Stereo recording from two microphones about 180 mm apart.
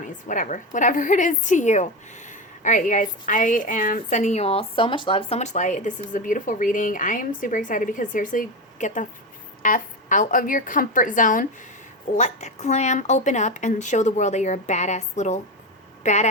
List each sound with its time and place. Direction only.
0.3 s a woman's voice: 45° left (ahead or behind)